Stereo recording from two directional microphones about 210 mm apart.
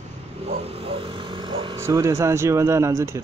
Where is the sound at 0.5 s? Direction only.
30° right (ahead or behind).